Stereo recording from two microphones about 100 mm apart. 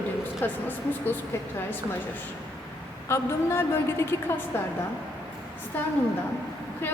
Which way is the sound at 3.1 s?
25° left (ahead or behind).